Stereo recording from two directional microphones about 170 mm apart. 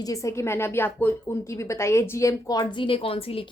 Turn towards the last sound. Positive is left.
turn(degrees=35)  # may be behind; listen again after turning